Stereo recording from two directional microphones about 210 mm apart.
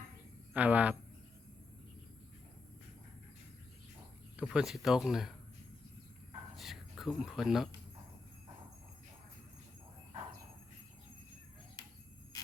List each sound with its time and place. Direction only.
0.5 s speech: 5° right (ahead or behind)
4.4 s speech: 5° right (ahead or behind)
6.6 s a sound: centre (ahead or behind)